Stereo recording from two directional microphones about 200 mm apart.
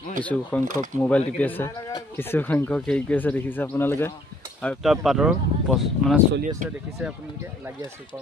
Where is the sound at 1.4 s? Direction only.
10° left (ahead or behind); by 8.0 s 10° right (ahead or behind).